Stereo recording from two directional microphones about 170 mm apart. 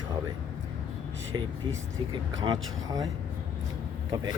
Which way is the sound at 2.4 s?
25° right (ahead or behind).